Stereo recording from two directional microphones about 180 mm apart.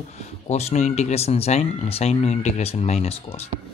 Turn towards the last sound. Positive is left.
turn(degrees=35)  # may be behind; listen again after turning